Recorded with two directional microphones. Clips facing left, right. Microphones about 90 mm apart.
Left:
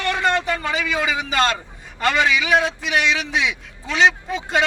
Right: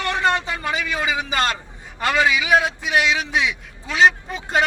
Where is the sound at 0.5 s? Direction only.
10° right (ahead or behind).